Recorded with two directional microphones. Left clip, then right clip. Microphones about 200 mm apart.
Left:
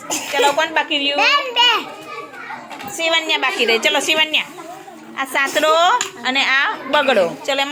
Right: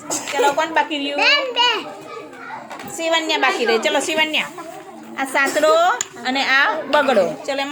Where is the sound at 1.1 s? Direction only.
50° left (ahead or behind).